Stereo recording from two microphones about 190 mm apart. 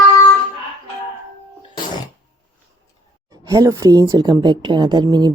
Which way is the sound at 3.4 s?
15° right (ahead or behind).